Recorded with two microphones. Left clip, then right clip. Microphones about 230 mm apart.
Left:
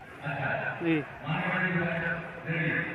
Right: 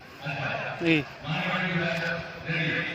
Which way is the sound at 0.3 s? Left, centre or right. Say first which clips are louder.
Even; right.